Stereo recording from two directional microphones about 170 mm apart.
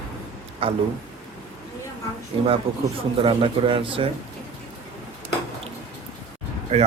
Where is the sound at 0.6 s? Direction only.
35° right (ahead or behind).